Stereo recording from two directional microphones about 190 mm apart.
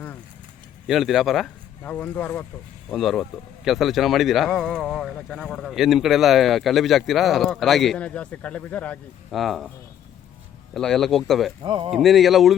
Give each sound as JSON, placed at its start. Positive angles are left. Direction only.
{"t": 0.9, "sound": "speech", "side_deg": 0}
{"t": 10.8, "sound": "speech", "side_deg": 0}
{"t": 11.6, "sound": "speech", "side_deg": -25}
{"t": 11.9, "sound": "speech", "side_deg": 0}